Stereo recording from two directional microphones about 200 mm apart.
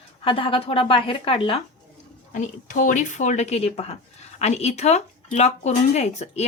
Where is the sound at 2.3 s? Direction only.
40° left (ahead or behind).